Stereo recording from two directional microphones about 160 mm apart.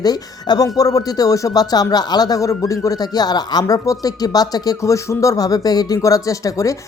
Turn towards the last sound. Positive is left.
turn(degrees=20)  # may be behind; listen again after turning